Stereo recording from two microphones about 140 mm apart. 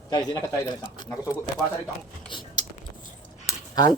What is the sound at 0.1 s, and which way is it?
Speech, 30° left (ahead or behind).